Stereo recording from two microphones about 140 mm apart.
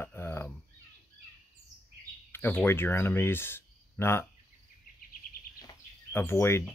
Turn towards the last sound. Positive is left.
turn(degrees=15)  # may be behind; listen again after turning